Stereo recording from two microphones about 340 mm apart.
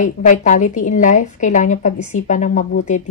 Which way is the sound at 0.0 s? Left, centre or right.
Left.